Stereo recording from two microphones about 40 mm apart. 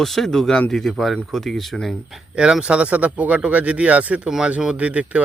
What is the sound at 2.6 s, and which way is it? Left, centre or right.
Speech, right.